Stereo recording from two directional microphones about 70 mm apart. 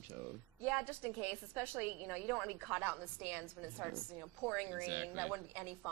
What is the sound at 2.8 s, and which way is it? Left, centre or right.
Speech, right.